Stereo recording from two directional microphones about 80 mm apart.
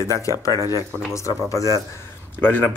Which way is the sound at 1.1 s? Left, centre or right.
Left.